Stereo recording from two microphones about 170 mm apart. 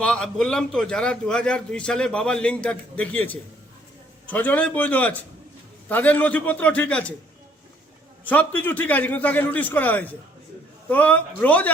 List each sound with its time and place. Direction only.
0.0 s a man's voice: 5° left (ahead or behind)
8.2 s a man's voice: 10° left (ahead or behind)